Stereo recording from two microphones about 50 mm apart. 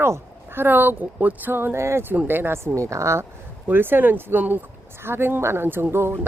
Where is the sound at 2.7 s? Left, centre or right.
Right.